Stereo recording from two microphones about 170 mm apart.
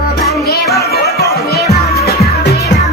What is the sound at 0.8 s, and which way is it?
Music, 65° left (ahead or behind).